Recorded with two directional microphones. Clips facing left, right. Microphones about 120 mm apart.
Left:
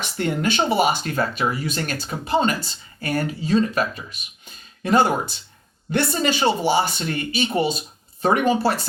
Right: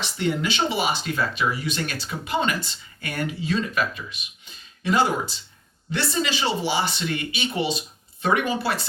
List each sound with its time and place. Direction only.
0.0 s speech: 50° left (ahead or behind)